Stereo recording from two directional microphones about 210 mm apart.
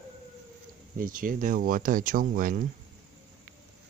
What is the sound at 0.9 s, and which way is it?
Speech, 40° right (ahead or behind).